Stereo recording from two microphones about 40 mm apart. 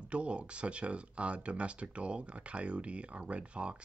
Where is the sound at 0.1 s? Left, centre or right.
Right.